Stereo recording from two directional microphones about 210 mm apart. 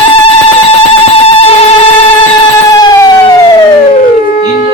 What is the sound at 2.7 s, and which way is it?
Emergency vehicle, 20° left (ahead or behind).